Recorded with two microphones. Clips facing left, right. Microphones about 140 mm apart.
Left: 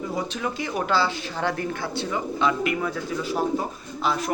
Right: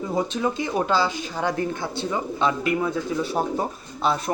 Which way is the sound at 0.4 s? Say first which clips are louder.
Right 3 dB; 25° right (ahead or behind).